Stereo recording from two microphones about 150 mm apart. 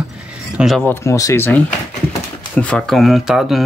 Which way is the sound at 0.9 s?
20° left (ahead or behind).